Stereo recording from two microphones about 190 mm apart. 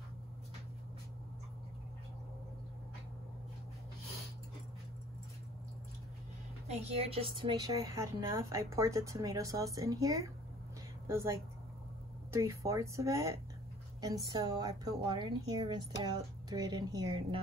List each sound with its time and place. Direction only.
6.8 s a woman's voice: 30° right (ahead or behind)